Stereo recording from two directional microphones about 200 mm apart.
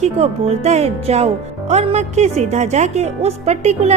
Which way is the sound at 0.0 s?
35° right (ahead or behind).